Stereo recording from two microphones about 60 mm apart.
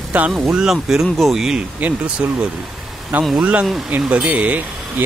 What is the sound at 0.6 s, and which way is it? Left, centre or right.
Speech, centre.